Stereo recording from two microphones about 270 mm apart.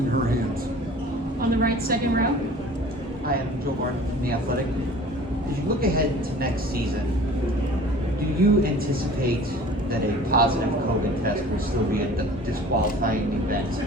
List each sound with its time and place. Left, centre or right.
1.4 s a sound: right
5.8 s a woman's voice: right
8.4 s a woman's voice: right
10.3 s a woman's voice: right